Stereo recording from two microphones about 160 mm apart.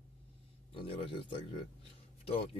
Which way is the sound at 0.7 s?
35° left (ahead or behind).